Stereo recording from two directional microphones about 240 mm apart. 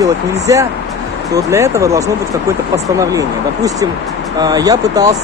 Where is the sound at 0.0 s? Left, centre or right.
Centre.